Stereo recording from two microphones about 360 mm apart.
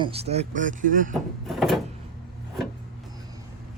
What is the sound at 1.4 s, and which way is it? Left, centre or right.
Door, centre.